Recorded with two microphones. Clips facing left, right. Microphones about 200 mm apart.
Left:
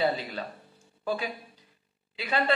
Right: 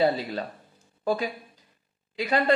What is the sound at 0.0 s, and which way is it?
Speech, 40° right (ahead or behind).